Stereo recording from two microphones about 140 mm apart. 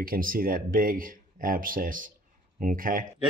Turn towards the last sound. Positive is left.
turn(degrees=-80)